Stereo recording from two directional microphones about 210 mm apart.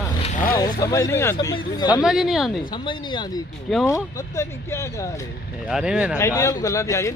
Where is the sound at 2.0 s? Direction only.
Centre (ahead or behind).